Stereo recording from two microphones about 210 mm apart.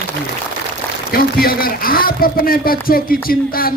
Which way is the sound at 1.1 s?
45° left (ahead or behind).